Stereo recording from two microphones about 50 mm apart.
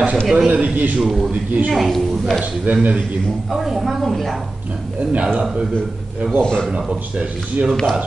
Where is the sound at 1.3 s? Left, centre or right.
Right.